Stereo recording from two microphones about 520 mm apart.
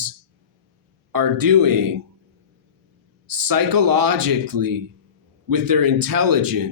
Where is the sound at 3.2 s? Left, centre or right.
Right.